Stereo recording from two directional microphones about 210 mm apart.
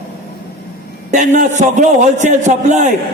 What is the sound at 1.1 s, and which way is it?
A man's voice, 35° right (ahead or behind).